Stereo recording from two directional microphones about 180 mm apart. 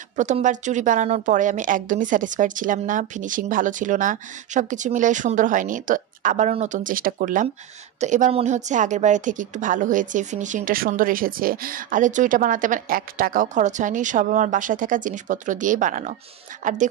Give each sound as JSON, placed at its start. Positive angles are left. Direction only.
{"t": 0.2, "sound": "a woman's voice", "side_deg": -45}